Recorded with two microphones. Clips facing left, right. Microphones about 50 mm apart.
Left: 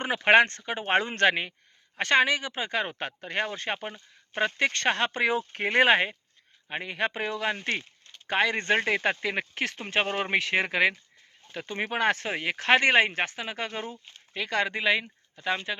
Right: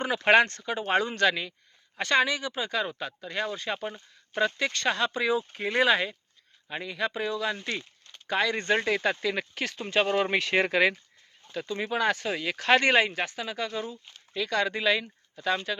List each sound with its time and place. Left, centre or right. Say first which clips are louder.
0.3 s speech: left 1 dB; left; by 10.9 s centre
11.6 s speech: left 1 dB; left
13.1 s speech: left 1 dB; left
14.1 s speech: right 1 dB; left